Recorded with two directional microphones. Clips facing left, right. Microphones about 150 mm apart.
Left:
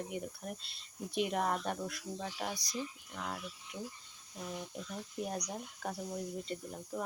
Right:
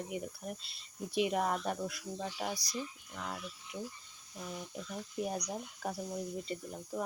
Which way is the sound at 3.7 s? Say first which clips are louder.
Right 2 dB; 15° right (ahead or behind).